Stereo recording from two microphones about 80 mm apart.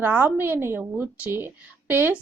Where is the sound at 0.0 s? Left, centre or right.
Right.